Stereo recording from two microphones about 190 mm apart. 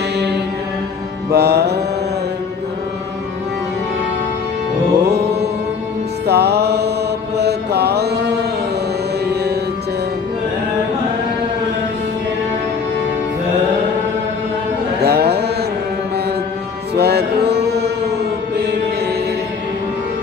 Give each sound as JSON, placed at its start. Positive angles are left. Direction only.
{"t": 1.3, "sound": "music", "side_deg": -60}
{"t": 5.0, "sound": "music", "side_deg": -60}
{"t": 7.3, "sound": "mantra", "side_deg": -60}
{"t": 9.2, "sound": "music", "side_deg": -60}
{"t": 15.0, "sound": "mantra", "side_deg": -60}
{"t": 16.9, "sound": "music", "side_deg": -60}